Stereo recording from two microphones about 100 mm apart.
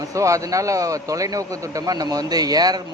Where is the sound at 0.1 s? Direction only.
30° right (ahead or behind).